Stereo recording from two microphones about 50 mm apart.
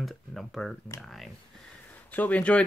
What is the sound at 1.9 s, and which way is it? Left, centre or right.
Speech, left.